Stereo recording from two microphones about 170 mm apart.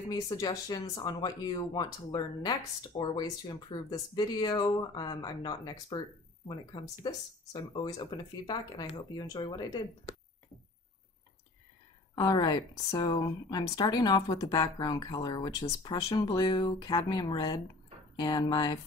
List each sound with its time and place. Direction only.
0.1 s speech: 20° left (ahead or behind)
12.2 s speech: 25° left (ahead or behind)